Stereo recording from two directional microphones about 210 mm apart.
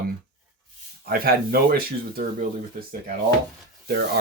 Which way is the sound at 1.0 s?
45° right (ahead or behind).